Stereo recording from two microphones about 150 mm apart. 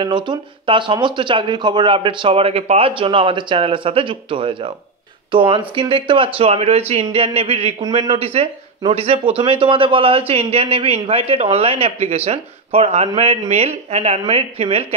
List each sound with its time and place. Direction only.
0.0 s speech: 30° right (ahead or behind)